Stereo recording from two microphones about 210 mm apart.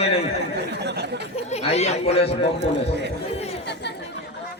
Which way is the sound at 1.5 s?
30° left (ahead or behind).